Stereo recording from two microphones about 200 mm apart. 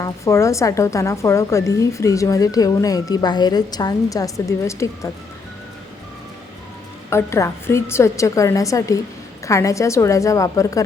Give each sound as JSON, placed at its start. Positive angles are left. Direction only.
{"t": 0.0, "sound": "speech", "side_deg": 15}
{"t": 7.1, "sound": "speech", "side_deg": 15}